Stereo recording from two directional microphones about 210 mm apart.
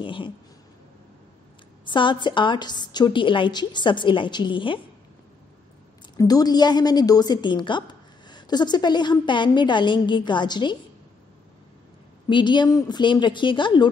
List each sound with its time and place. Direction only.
0.0 s a woman's voice: 25° left (ahead or behind)
1.9 s a woman's voice: 20° left (ahead or behind)
6.1 s a woman's voice: 15° left (ahead or behind)
12.3 s a woman's voice: 20° left (ahead or behind)